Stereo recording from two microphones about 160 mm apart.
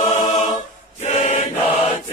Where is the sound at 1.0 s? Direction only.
45° left (ahead or behind).